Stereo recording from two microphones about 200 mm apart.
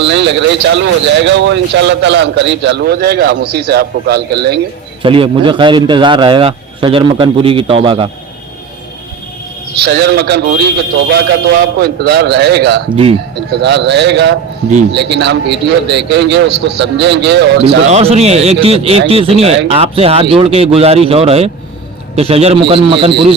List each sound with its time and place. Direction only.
0.0 s speech: 65° right (ahead or behind)
5.0 s a man's voice: 25° right (ahead or behind)
9.8 s speech: 55° right (ahead or behind)
11.8 s speech: 55° right (ahead or behind)
13.0 s a man's voice: 30° right (ahead or behind)
13.5 s speech: 60° right (ahead or behind)
17.9 s a man's voice: 30° right (ahead or behind)